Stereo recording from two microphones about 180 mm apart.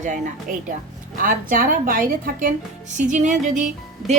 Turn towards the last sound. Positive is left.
turn(degrees=0)  # may be behind; listen again after turning